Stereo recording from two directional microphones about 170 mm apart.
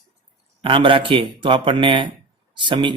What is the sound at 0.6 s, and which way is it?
A man's voice, 30° right (ahead or behind).